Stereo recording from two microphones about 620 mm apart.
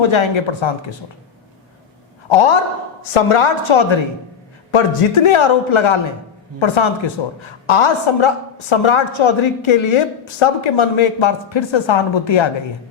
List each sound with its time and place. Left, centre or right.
0.0 s a woman's voice: left
3.1 s a woman's voice: left